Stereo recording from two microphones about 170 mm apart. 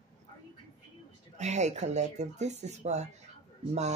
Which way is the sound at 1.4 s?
40° right (ahead or behind).